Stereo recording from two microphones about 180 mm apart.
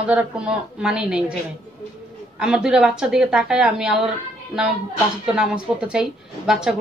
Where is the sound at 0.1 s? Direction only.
5° right (ahead or behind).